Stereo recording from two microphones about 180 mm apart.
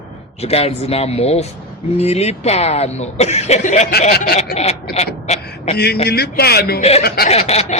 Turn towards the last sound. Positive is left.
turn(degrees=35)  # may be behind; listen again after turning